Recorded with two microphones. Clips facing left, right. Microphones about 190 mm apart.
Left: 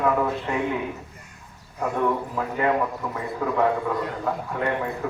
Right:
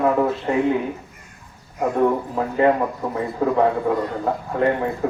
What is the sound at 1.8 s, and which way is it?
A man's voice, 35° right (ahead or behind).